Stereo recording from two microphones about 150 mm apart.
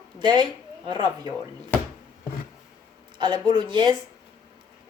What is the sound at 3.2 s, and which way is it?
Speech, 30° right (ahead or behind).